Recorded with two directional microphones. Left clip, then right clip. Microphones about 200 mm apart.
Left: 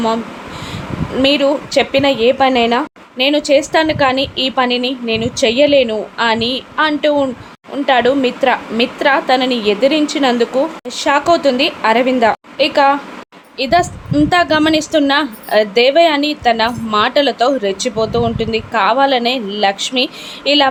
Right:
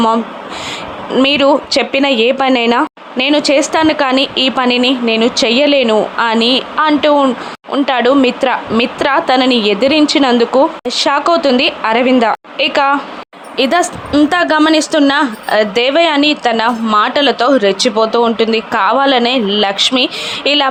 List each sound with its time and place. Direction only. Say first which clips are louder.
1.1 s a woman's voice: right 3 dB; 15° right (ahead or behind)